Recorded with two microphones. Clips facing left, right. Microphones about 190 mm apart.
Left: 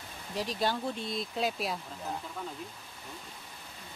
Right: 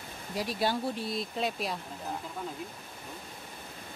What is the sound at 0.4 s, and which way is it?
Speech, 10° right (ahead or behind).